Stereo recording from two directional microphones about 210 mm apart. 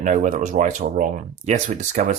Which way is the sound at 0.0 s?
40° right (ahead or behind).